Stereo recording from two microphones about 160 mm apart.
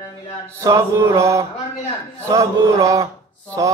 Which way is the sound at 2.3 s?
20° right (ahead or behind).